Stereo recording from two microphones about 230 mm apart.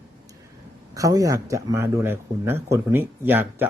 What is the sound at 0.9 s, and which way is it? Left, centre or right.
A man's voice, centre.